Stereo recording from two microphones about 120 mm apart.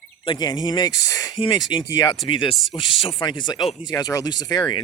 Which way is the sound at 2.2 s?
45° left (ahead or behind).